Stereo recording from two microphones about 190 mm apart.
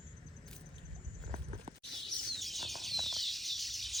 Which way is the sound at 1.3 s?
30° right (ahead or behind).